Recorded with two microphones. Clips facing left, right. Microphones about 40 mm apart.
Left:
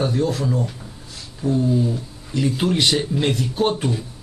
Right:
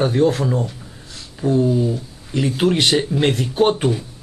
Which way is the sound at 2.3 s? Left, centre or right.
Right.